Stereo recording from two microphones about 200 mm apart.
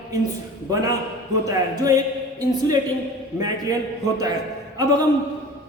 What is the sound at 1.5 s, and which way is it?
Speech, 15° right (ahead or behind).